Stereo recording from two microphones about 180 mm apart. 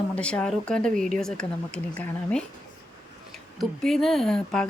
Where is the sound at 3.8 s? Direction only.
Centre (ahead or behind).